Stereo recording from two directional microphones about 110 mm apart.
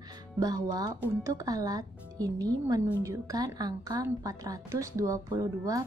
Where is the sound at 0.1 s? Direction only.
35° right (ahead or behind).